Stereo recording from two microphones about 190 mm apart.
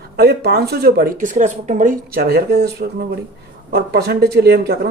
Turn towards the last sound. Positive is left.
turn(degrees=-55)  # may be behind; listen again after turning